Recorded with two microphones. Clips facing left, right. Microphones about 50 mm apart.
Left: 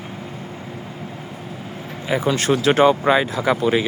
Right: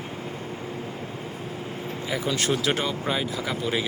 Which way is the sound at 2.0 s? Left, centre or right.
Left.